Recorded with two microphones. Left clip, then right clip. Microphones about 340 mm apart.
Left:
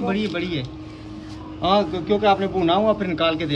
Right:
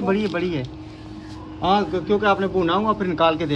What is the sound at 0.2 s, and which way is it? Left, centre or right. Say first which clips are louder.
Speech: right 2 dB; centre.